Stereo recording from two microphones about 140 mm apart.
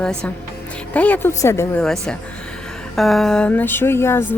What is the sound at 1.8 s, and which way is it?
A woman's voice, 5° left (ahead or behind).